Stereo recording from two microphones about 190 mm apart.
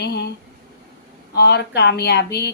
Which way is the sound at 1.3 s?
60° left (ahead or behind).